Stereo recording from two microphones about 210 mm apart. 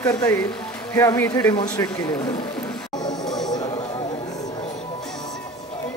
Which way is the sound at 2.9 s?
20° left (ahead or behind).